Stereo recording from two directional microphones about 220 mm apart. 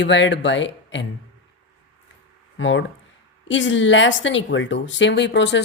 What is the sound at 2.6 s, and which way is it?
Speech, 55° left (ahead or behind).